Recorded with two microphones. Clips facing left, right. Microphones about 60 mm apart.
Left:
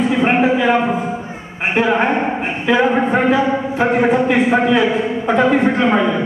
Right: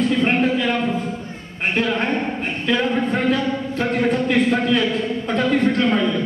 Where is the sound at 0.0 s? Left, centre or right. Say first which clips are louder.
Left 4 dB; centre.